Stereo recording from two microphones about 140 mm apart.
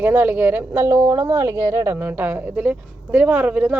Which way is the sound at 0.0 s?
10° right (ahead or behind).